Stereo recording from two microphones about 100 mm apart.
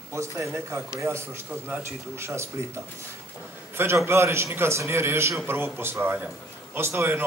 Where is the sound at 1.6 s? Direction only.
15° right (ahead or behind).